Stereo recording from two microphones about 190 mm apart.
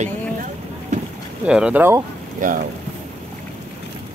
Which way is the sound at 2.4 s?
45° right (ahead or behind).